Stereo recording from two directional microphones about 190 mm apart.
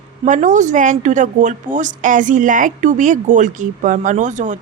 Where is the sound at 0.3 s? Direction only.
40° right (ahead or behind).